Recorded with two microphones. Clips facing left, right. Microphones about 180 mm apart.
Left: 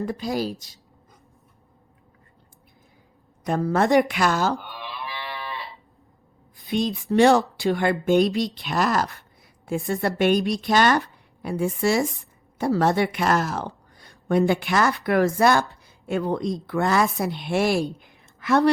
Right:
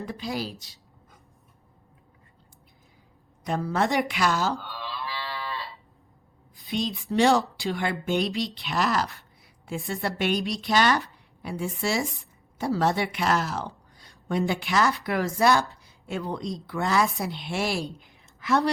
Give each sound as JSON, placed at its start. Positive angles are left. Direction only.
{"t": 0.0, "sound": "a woman's voice", "side_deg": 45}
{"t": 3.4, "sound": "a woman's voice", "side_deg": 50}
{"t": 4.5, "sound": "livestock", "side_deg": 15}
{"t": 7.1, "sound": "a woman's voice", "side_deg": 60}
{"t": 11.7, "sound": "speech", "side_deg": 0}
{"t": 12.5, "sound": "a woman's voice", "side_deg": 55}
{"t": 18.0, "sound": "a sound", "side_deg": 55}